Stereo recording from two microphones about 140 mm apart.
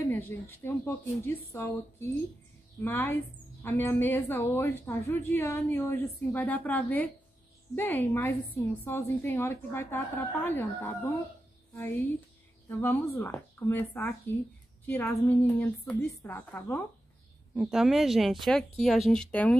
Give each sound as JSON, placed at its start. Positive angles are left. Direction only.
{"t": 0.1, "sound": "a woman's voice", "side_deg": 15}
{"t": 17.6, "sound": "a woman's voice", "side_deg": 0}